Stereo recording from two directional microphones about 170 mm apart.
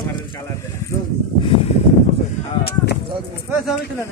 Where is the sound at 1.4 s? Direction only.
30° left (ahead or behind).